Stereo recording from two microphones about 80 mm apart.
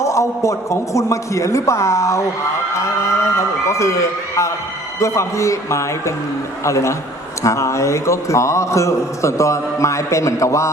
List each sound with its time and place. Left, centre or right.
0.0 s a man's voice: left